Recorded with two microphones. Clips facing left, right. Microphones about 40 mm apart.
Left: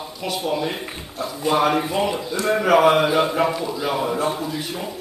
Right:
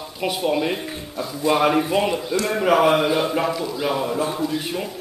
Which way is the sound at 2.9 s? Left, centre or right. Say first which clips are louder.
Left 2 dB; left.